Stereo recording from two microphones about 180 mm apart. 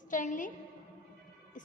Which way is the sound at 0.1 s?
45° left (ahead or behind).